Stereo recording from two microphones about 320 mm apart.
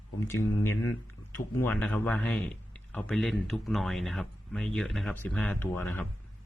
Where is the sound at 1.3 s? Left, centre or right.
Centre.